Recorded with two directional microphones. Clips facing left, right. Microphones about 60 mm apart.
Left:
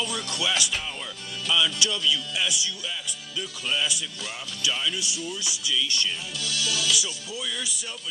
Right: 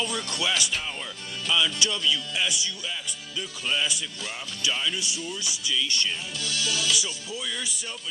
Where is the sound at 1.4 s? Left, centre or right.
Right.